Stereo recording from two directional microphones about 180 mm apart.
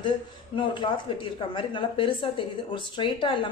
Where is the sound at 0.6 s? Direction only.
30° left (ahead or behind).